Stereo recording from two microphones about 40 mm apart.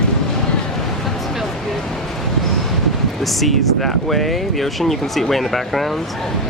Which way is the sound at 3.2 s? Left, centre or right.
Centre.